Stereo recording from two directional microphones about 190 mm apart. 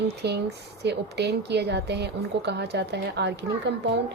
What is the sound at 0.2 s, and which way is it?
A woman's voice, 60° right (ahead or behind).